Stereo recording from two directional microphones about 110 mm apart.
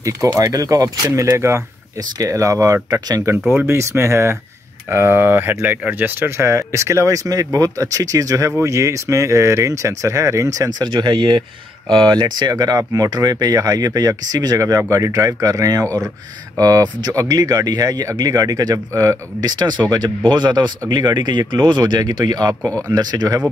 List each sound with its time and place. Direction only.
0.0 s speech: 30° right (ahead or behind)